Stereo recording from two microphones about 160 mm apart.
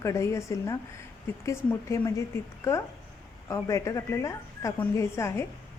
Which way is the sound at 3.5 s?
20° left (ahead or behind).